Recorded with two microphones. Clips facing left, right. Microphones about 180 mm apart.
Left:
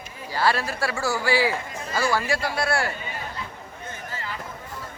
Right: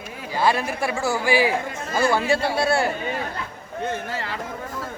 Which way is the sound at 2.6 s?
25° right (ahead or behind).